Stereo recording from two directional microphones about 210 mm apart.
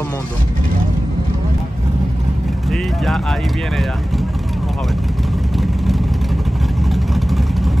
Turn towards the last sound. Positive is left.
turn(degrees=0)  # may be behind; listen again after turning